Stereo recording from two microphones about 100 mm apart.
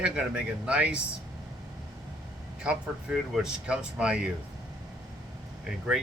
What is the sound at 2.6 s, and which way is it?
Speech, 10° right (ahead or behind).